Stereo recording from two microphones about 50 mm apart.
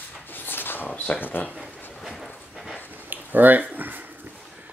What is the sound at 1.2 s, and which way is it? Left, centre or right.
Speech, left.